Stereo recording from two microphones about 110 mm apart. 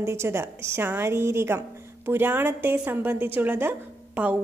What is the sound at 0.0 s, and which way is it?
A woman's voice, 25° right (ahead or behind).